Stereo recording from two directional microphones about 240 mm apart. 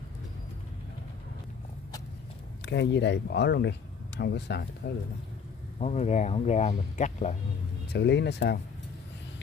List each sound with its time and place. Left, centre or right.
2.6 s speech: left
5.8 s speech: left
7.9 s speech: left